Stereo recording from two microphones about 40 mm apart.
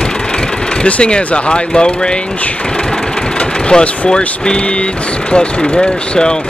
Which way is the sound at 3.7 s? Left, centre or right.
Left.